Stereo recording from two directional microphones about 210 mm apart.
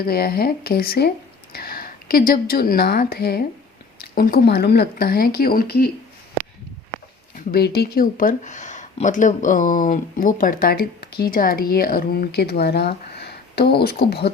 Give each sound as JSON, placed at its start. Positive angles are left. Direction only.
{"t": 0.0, "sound": "speech", "side_deg": 45}
{"t": 7.5, "sound": "speech", "side_deg": 50}